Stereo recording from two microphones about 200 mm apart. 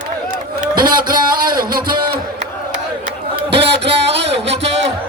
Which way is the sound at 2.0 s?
50° right (ahead or behind).